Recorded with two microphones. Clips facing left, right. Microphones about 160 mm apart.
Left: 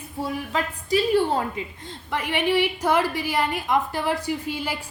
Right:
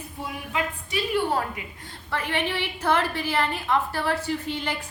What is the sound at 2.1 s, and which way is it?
A woman's voice, 15° left (ahead or behind).